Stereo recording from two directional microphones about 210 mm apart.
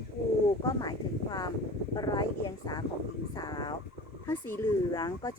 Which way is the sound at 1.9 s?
20° left (ahead or behind).